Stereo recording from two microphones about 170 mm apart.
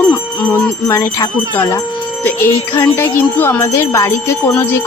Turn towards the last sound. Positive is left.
turn(degrees=15)  # may be behind; listen again after turning